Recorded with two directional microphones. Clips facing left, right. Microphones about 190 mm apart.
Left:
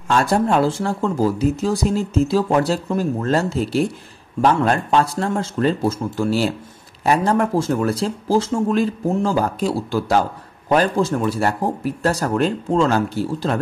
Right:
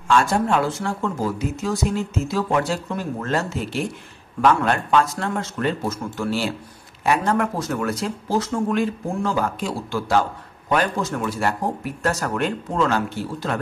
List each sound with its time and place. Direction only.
0.1 s speech: 35° left (ahead or behind)